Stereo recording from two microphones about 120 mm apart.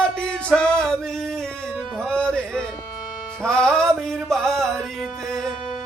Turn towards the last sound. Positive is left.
turn(degrees=5)  # may be behind; listen again after turning